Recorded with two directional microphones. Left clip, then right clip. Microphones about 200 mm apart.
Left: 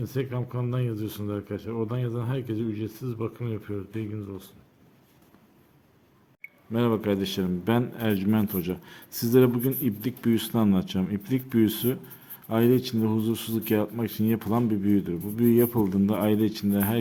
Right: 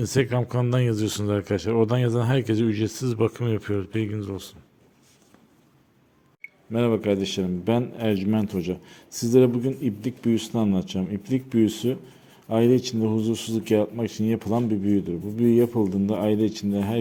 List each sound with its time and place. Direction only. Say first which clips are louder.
0.0 s speech: right 8 dB; 40° right (ahead or behind)
6.7 s a man's voice: right 3 dB; 10° right (ahead or behind)